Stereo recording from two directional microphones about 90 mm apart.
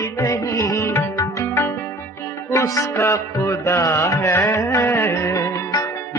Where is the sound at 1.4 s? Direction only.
25° left (ahead or behind).